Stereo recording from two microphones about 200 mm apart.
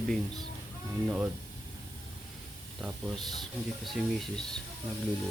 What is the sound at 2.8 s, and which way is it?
Speech, centre (ahead or behind).